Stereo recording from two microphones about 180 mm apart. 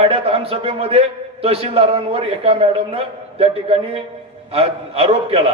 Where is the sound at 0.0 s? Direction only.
35° right (ahead or behind).